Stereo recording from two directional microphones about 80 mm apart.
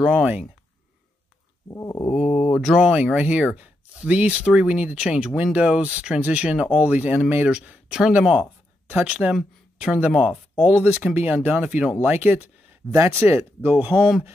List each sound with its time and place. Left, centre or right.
0.0 s speech: centre
1.7 s a sound: left
2.1 s speech: centre
2.8 s speech: centre
8.8 s speech: centre
12.9 s speech: right